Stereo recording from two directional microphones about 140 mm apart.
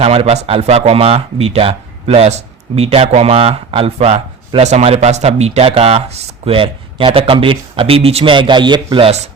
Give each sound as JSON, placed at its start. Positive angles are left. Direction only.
{"t": 0.0, "sound": "speech", "side_deg": -45}